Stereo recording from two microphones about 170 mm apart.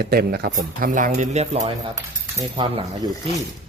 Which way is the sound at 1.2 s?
40° right (ahead or behind).